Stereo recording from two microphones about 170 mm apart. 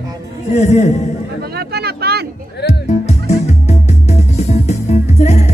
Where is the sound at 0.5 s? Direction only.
45° left (ahead or behind).